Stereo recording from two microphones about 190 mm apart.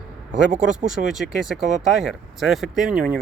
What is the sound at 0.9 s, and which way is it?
Speech, centre (ahead or behind).